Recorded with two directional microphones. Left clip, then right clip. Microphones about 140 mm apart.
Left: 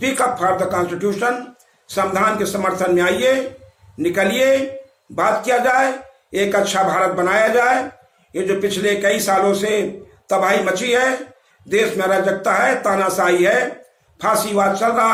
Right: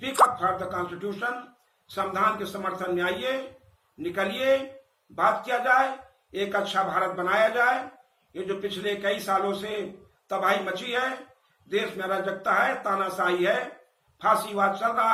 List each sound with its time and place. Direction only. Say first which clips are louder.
0.0 s a man's voice: left 4 dB; 45° left (ahead or behind)